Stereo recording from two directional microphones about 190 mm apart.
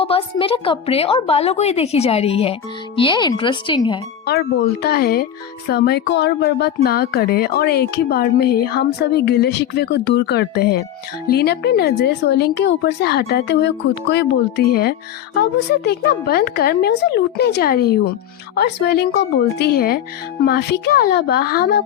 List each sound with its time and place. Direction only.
0.0 s a woman's voice: 30° left (ahead or behind)
4.3 s speech: 60° left (ahead or behind)